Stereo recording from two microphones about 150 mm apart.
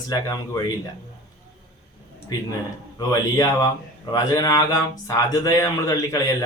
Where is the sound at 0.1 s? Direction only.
25° left (ahead or behind).